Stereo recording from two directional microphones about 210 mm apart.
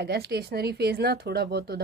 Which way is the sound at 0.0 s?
50° right (ahead or behind).